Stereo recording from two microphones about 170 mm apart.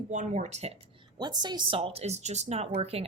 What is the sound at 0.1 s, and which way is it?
Speech, 45° right (ahead or behind).